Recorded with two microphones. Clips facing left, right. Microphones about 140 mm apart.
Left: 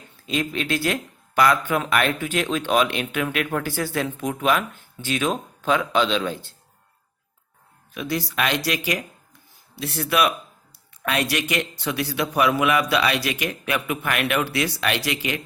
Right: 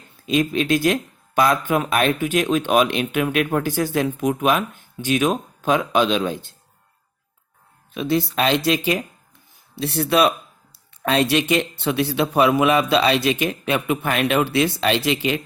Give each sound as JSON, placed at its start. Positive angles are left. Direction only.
{"t": 0.3, "sound": "speech", "side_deg": -20}
{"t": 7.9, "sound": "speech", "side_deg": -25}